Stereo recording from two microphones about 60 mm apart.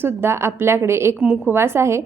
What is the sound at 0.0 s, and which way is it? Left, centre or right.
A woman's voice, right.